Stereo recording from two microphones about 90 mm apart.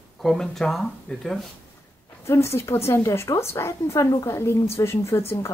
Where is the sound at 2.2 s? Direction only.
30° left (ahead or behind).